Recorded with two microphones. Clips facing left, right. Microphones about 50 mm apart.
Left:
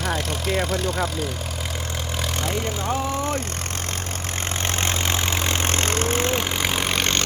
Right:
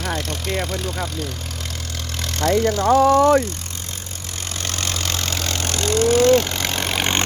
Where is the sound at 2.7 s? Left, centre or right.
Right.